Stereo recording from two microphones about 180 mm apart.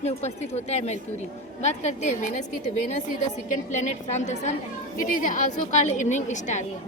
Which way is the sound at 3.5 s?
45° left (ahead or behind).